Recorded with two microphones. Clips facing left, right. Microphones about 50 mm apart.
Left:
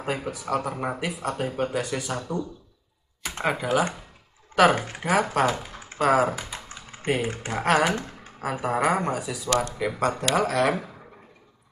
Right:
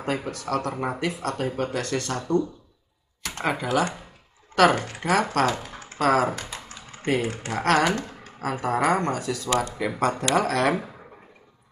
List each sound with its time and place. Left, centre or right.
0.0 s speech: centre
3.2 s computer keyboard: centre
3.6 s speech: centre
6.7 s typing: left
7.1 s speech: centre